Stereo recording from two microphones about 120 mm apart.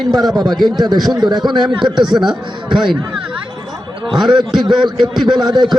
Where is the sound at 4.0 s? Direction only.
40° right (ahead or behind).